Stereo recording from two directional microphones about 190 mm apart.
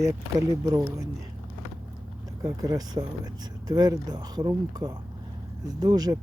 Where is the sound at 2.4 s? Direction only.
20° right (ahead or behind).